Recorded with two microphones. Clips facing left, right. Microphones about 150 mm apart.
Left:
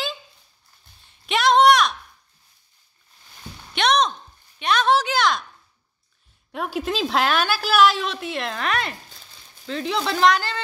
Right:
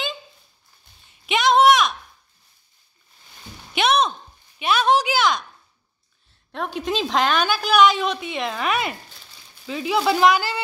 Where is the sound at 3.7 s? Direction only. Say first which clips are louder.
Even; 5° right (ahead or behind).